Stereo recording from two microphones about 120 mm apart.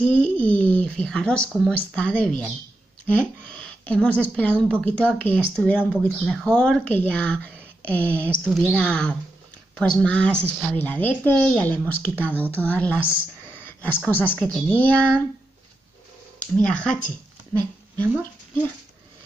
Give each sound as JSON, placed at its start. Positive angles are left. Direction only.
{"t": 0.0, "sound": "speech", "side_deg": 10}
{"t": 8.5, "sound": "speech", "side_deg": -5}
{"t": 8.7, "sound": "speech", "side_deg": 10}
{"t": 16.3, "sound": "speech", "side_deg": 10}